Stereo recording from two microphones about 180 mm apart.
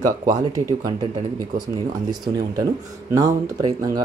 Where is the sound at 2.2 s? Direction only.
20° right (ahead or behind).